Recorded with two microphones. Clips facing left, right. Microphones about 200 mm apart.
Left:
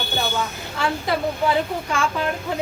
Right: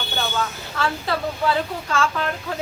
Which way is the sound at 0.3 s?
15° left (ahead or behind).